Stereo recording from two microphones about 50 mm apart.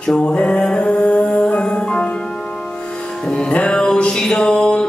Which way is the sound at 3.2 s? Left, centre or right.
Centre.